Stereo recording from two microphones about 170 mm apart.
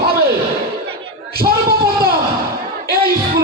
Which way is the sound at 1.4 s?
65° right (ahead or behind).